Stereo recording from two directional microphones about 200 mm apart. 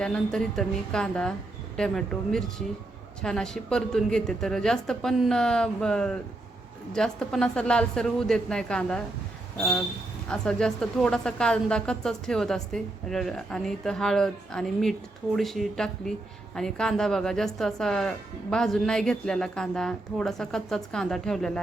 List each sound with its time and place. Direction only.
0.0 s a woman's voice: 5° left (ahead or behind)
10.2 s a woman's voice: 5° left (ahead or behind)